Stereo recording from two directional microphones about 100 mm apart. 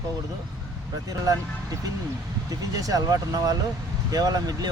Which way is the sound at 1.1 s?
35° right (ahead or behind).